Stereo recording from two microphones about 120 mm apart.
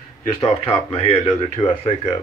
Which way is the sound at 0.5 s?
60° left (ahead or behind).